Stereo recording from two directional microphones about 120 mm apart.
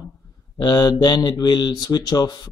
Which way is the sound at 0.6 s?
35° left (ahead or behind).